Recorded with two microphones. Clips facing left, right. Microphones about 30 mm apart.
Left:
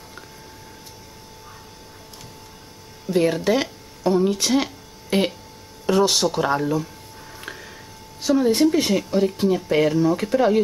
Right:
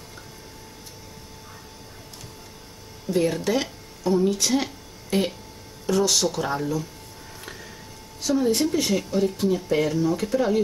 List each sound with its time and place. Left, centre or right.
3.1 s speech: centre
5.1 s speech: left
7.4 s a sound: centre
8.2 s a woman's voice: left